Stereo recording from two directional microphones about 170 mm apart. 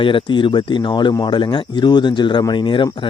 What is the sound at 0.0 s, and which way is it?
Speech, 30° left (ahead or behind).